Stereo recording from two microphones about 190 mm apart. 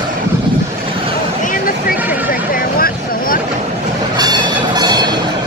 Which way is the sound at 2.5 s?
50° left (ahead or behind).